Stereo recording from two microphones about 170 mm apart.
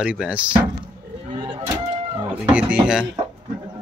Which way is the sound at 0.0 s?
5° right (ahead or behind).